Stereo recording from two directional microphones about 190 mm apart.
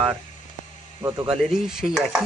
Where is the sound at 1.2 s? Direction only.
Centre (ahead or behind).